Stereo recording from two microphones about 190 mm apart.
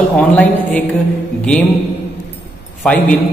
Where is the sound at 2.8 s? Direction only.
5° left (ahead or behind).